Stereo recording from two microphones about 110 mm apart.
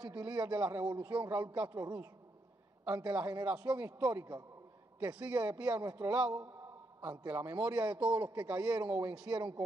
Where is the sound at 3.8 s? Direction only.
15° right (ahead or behind).